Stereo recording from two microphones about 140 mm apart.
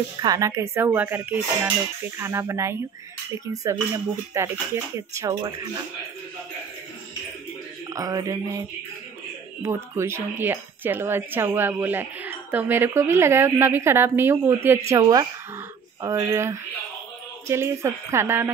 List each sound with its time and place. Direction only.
0.2 s speech: 25° right (ahead or behind)
7.9 s speech: 25° right (ahead or behind)
14.9 s speech: 25° right (ahead or behind)